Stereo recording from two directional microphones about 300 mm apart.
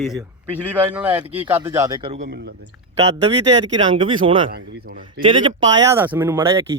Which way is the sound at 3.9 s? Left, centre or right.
Centre.